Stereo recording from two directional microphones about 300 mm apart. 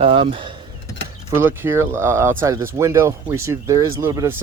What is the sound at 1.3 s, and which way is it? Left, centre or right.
Speech, centre.